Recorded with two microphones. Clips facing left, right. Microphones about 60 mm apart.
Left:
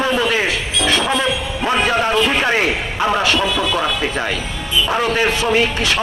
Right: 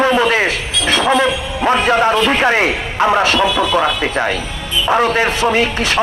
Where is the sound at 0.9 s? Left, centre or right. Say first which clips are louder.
Right 6 dB; right.